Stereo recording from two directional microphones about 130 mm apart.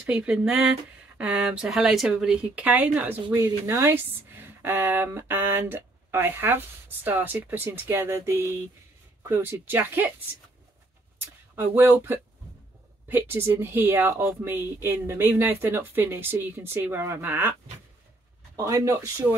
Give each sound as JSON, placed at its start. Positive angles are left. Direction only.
{"t": 0.0, "sound": "speech", "side_deg": -10}
{"t": 3.3, "sound": "speech", "side_deg": -20}
{"t": 11.1, "sound": "speech", "side_deg": -15}
{"t": 18.6, "sound": "speech", "side_deg": -25}